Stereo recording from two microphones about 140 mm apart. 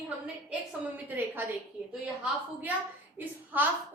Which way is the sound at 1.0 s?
15° right (ahead or behind).